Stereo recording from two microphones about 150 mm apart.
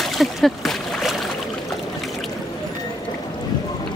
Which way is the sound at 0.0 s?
Centre (ahead or behind).